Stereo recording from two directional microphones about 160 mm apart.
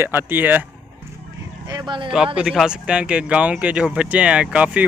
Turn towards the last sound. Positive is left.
turn(degrees=-5)  # may be behind; listen again after turning